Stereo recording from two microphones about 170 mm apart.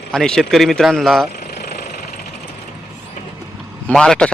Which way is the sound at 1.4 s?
70° left (ahead or behind).